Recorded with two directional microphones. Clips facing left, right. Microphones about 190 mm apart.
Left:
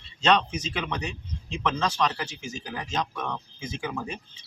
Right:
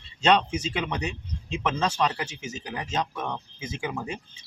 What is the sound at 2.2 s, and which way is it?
Speech, 20° right (ahead or behind).